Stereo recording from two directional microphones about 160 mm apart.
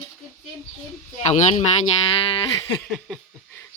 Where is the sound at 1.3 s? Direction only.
40° left (ahead or behind).